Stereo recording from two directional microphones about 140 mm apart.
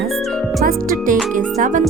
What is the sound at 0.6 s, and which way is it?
Speech, 90° right.